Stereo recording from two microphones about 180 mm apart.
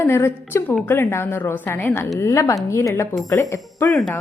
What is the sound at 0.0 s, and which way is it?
A woman's voice, 10° left (ahead or behind).